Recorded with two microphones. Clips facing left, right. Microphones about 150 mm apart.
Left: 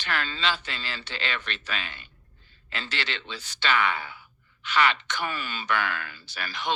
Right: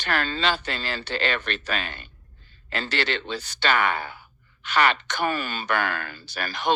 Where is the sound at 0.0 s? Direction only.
45° right (ahead or behind).